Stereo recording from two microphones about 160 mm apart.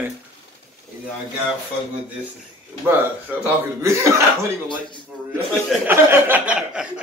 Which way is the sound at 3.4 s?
20° right (ahead or behind).